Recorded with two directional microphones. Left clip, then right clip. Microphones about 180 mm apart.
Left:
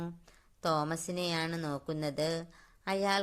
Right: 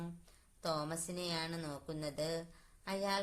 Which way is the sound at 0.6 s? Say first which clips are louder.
Left 7 dB; 40° left (ahead or behind).